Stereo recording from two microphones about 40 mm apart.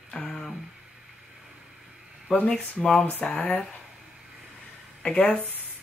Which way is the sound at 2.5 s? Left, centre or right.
Centre.